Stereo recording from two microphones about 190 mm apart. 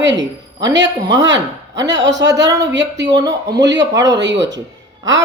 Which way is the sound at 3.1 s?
20° right (ahead or behind).